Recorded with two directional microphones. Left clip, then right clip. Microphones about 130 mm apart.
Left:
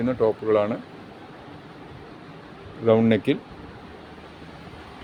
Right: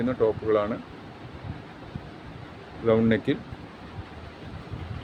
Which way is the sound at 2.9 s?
45° left (ahead or behind).